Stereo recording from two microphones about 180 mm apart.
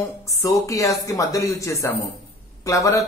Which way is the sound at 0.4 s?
20° left (ahead or behind).